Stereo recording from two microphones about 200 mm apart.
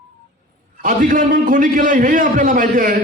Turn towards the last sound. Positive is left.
turn(degrees=-40)  # may be behind; listen again after turning